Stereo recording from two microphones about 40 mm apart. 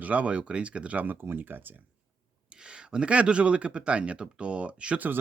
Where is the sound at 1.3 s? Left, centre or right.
Right.